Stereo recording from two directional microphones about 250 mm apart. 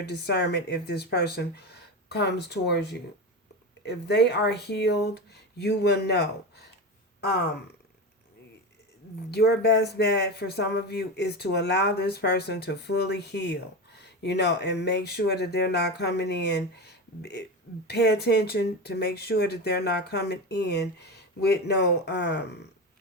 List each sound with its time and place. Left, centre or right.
0.0 s speech: left
9.3 s speech: left